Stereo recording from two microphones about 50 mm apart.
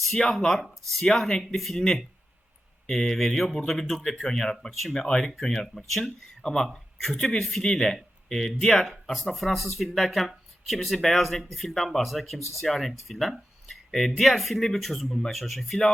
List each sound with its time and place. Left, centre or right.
0.1 s speech: centre
2.8 s speech: centre
6.7 s speech: centre
7.2 s speech: left
7.4 s speech: centre